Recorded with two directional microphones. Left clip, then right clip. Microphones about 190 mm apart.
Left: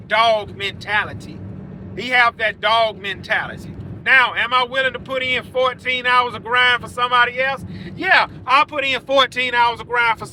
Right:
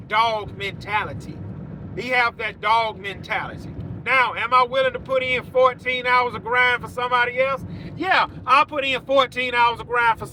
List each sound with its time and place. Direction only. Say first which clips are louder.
0.1 s speech: left 5 dB; 5° right (ahead or behind)
8.4 s speech: left 2 dB; 20° right (ahead or behind)
9.0 s speech: left 3 dB; 10° right (ahead or behind)